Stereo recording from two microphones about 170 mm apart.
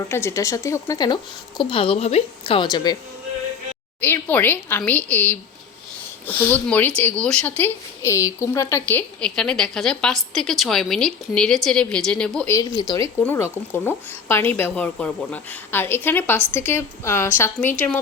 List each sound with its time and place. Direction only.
0.1 s speech: 15° left (ahead or behind)
4.0 s speech: 10° left (ahead or behind)
12.5 s speech: 20° left (ahead or behind)